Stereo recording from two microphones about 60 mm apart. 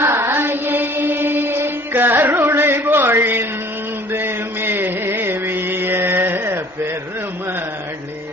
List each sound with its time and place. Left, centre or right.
0.0 s music: right
0.3 s mantra: right
4.1 s music: right